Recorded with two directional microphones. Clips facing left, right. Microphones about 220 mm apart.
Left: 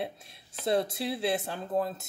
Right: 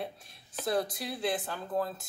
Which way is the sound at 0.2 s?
25° left (ahead or behind).